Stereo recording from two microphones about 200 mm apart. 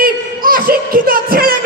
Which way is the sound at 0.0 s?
45° right (ahead or behind).